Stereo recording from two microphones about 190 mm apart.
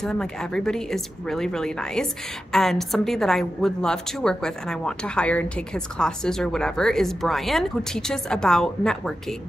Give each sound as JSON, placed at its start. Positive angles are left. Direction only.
{"t": 0.0, "sound": "speech", "side_deg": 5}